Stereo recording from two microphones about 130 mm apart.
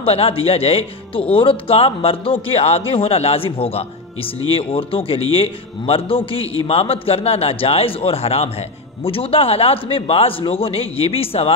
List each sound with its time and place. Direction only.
0.0 s speech: 45° left (ahead or behind)